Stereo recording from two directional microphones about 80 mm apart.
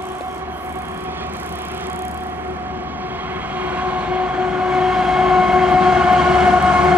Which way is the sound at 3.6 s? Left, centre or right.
Centre.